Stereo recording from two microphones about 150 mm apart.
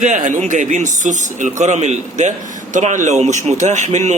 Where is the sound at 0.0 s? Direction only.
55° right (ahead or behind).